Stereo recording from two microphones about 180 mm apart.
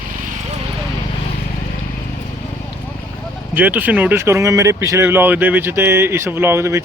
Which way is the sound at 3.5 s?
10° right (ahead or behind).